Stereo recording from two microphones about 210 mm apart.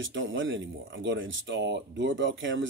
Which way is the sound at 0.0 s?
65° right (ahead or behind).